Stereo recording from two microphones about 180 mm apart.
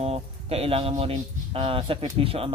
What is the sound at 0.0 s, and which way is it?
Speech, 35° right (ahead or behind).